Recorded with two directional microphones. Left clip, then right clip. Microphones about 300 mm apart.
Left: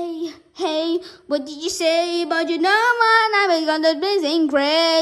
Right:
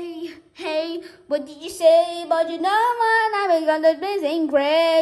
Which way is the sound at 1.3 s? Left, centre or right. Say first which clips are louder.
Left 2 dB; centre.